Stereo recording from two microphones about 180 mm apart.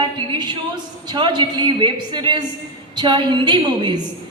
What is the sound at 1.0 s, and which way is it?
A woman's voice, 25° right (ahead or behind).